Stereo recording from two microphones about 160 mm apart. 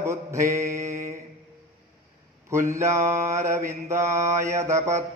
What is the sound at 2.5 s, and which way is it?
Mantra, 15° right (ahead or behind).